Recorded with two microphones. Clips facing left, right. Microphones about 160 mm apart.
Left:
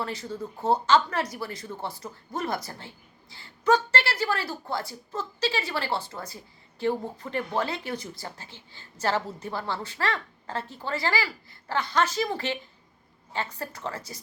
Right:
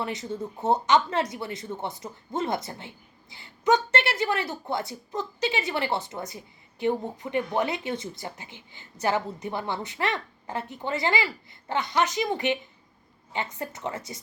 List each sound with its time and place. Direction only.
0.0 s a woman's voice: 20° right (ahead or behind)